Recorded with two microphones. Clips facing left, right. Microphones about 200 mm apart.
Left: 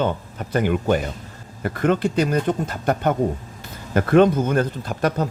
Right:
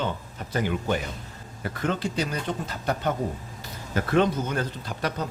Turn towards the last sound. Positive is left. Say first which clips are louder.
# left 7 dB
turn(degrees=50)  # may be behind; listen again after turning